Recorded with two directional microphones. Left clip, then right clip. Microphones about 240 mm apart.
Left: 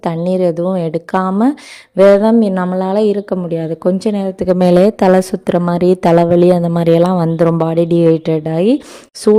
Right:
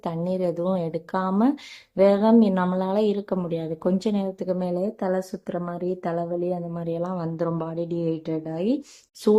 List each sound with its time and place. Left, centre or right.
0.0 s a woman's voice: left